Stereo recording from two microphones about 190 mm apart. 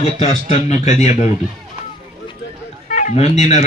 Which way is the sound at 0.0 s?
35° left (ahead or behind).